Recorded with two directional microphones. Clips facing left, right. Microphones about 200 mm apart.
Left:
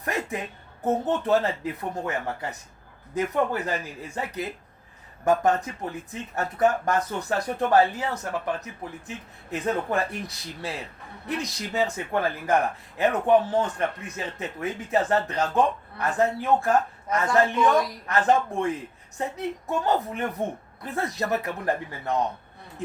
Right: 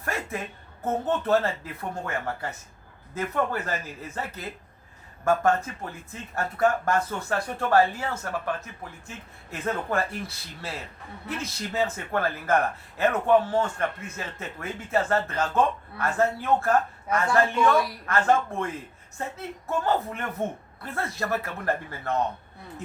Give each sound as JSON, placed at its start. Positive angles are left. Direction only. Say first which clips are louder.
{"t": 0.0, "sound": "speech", "louder": "left 2 dB", "side_deg": 15}